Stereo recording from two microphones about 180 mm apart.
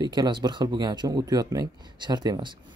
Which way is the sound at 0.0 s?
25° right (ahead or behind).